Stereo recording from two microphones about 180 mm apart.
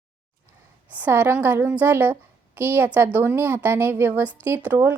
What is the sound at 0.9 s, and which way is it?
A woman's voice, 10° right (ahead or behind).